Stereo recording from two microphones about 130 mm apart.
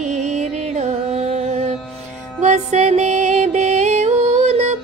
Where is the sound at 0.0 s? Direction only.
60° right (ahead or behind).